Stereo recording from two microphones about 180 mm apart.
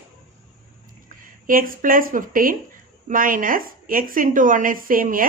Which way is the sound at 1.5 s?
50° right (ahead or behind).